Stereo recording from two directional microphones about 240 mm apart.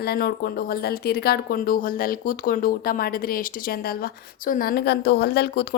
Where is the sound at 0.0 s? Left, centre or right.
Left.